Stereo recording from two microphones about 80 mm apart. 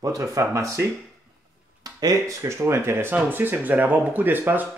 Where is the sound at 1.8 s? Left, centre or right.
Right.